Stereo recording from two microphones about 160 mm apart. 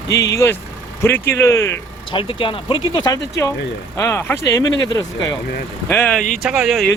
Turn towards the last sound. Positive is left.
turn(degrees=-5)  # may be behind; listen again after turning